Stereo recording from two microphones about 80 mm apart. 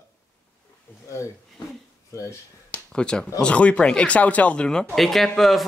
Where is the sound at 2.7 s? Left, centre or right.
Centre.